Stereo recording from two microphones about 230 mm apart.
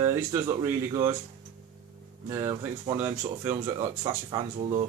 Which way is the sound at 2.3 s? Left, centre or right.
Centre.